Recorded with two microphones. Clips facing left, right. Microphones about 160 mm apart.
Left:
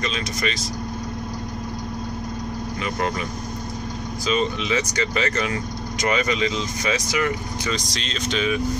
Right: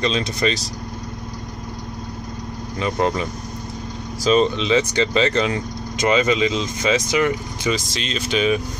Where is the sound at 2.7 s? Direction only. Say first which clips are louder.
Right 6 dB; 30° right (ahead or behind).